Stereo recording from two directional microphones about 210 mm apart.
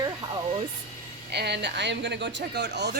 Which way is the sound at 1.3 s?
50° right (ahead or behind).